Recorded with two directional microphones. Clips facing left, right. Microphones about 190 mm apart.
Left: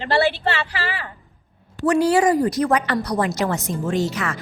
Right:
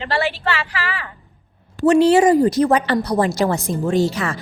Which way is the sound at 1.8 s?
25° right (ahead or behind).